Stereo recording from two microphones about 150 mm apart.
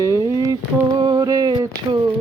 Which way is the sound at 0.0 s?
20° right (ahead or behind).